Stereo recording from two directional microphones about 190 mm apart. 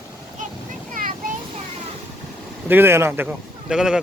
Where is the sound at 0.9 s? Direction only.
45° right (ahead or behind).